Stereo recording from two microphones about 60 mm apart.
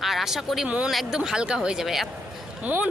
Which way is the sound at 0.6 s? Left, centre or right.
Right.